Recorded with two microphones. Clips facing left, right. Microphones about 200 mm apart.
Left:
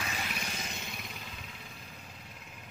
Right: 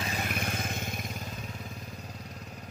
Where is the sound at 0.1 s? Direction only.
50° right (ahead or behind).